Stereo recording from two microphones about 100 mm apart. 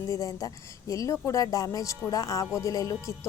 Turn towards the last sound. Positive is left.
turn(degrees=35)  # may be behind; listen again after turning